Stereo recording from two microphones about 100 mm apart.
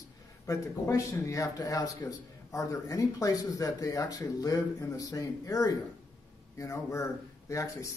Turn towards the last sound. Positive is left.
turn(degrees=30)  # may be behind; listen again after turning